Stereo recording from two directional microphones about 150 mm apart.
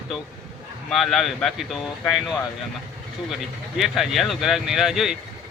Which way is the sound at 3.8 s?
Centre (ahead or behind).